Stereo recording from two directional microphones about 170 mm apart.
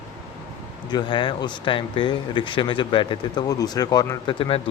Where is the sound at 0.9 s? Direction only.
25° left (ahead or behind).